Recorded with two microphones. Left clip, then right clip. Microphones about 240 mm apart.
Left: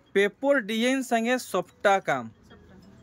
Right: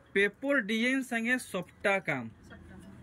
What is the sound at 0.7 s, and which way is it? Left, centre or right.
Speech, left.